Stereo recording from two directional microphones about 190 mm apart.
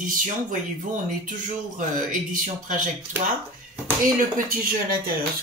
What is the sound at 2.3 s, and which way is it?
Speech, 45° right (ahead or behind).